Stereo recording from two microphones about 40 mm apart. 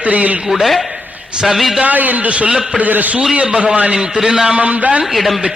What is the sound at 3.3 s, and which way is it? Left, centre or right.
A man's voice, right.